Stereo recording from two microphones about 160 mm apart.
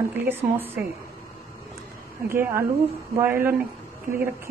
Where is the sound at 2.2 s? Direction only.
15° right (ahead or behind).